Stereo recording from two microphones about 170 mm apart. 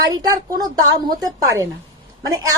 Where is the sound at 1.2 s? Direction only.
20° right (ahead or behind).